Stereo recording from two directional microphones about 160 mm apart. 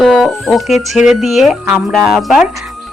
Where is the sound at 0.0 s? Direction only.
Centre (ahead or behind).